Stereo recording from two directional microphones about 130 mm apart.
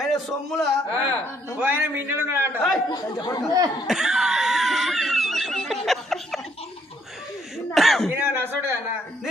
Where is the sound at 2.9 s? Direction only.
30° left (ahead or behind).